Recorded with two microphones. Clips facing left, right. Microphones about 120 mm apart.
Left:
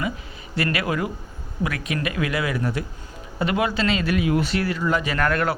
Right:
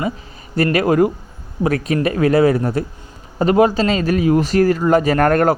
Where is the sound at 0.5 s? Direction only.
45° right (ahead or behind).